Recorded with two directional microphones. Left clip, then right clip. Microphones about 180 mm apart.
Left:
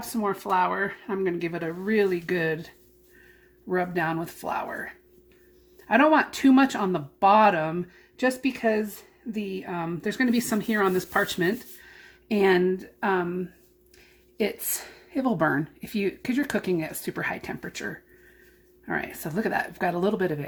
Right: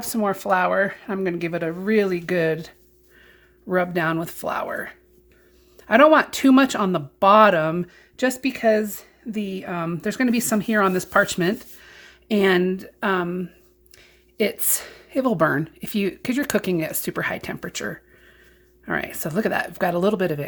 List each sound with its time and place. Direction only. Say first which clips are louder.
0.0 s speech: right 5 dB; 60° right (ahead or behind)
13.9 s a sound: right 5 dB; 45° right (ahead or behind)
15.1 s speech: right 5 dB; 45° right (ahead or behind)